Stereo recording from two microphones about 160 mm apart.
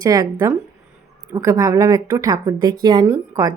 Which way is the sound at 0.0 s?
25° right (ahead or behind).